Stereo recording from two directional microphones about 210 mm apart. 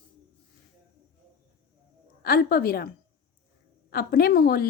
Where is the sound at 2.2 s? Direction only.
45° left (ahead or behind).